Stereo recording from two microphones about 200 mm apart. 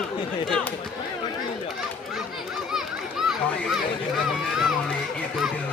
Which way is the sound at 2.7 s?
Centre (ahead or behind).